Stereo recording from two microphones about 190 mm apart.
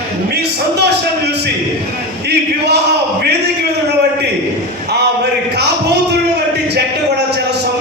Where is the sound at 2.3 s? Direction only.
60° right (ahead or behind).